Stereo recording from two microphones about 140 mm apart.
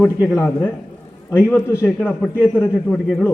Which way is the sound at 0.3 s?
10° left (ahead or behind).